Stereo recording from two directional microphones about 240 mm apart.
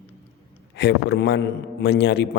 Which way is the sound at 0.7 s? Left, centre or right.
Left.